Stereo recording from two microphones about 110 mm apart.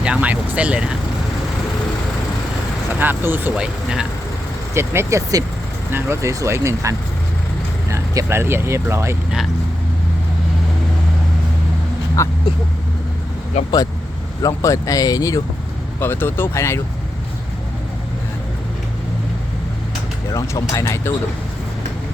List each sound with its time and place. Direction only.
0.0 s speech: 10° right (ahead or behind)
3.0 s speech: 20° right (ahead or behind)
3.5 s speech: 5° right (ahead or behind)
4.7 s speech: 25° right (ahead or behind)
12.2 s speech: 25° left (ahead or behind)
14.4 s speech: 30° left (ahead or behind)
16.0 s speech: 20° left (ahead or behind)
20.3 s speech: 25° left (ahead or behind)